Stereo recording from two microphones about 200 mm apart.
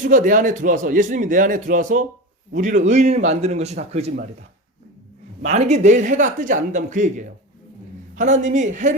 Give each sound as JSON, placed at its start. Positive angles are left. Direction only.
{"t": 0.0, "sound": "a man's voice", "side_deg": -40}
{"t": 5.4, "sound": "a man's voice", "side_deg": -35}